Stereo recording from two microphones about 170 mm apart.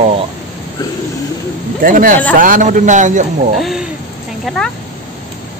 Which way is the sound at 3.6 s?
Centre (ahead or behind).